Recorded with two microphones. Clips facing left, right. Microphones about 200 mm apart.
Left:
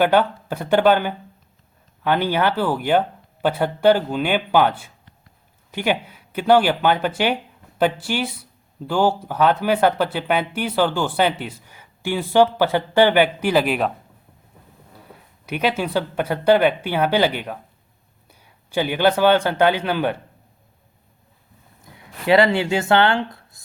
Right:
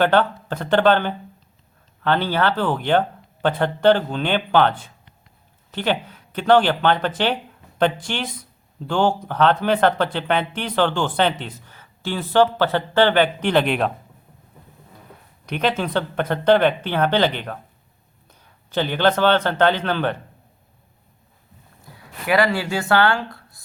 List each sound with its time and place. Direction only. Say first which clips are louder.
0.0 s speech: left 1 dB; 10° left (ahead or behind)
15.4 s a man's voice: even; 5° left (ahead or behind)
21.9 s speech: left 4 dB; 25° left (ahead or behind)